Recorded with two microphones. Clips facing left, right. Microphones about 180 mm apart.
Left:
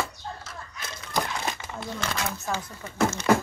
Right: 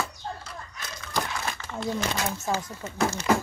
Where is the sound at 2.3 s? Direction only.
35° right (ahead or behind).